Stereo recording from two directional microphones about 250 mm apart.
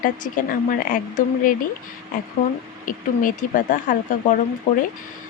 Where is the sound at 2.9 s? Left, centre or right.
Left.